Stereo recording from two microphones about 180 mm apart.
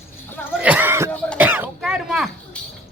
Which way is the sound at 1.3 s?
10° right (ahead or behind).